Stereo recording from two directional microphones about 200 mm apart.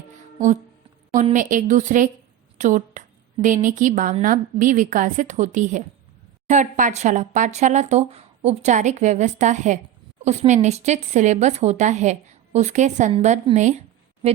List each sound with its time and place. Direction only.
1.1 s speech: 40° right (ahead or behind)